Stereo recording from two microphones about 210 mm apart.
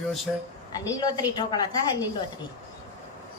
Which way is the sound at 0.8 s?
20° left (ahead or behind).